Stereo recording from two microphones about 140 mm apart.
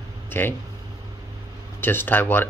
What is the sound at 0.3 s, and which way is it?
Speech, 15° left (ahead or behind).